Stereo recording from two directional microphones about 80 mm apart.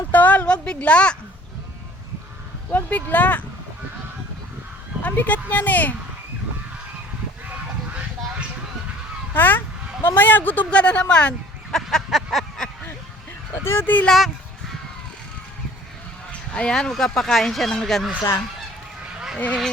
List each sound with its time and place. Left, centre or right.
0.1 s a sound: left
2.7 s speech: centre
5.0 s speech: left
9.3 s speech: left
11.7 s a sound: centre
13.7 s speech: left
16.5 s speech: centre